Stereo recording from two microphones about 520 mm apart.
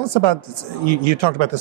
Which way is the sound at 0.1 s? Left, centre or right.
Right.